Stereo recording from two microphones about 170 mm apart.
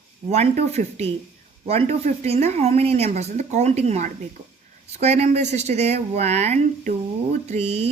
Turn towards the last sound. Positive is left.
turn(degrees=-40)  # may be behind; listen again after turning